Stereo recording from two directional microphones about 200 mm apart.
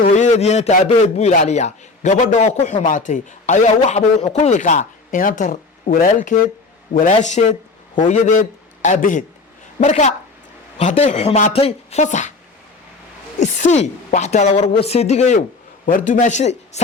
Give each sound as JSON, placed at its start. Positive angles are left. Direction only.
{"t": 0.0, "sound": "a man's voice", "side_deg": 35}
{"t": 13.4, "sound": "a man's voice", "side_deg": 35}